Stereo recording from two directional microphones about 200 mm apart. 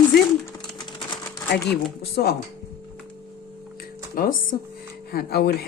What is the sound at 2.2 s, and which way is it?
Speech, 50° left (ahead or behind).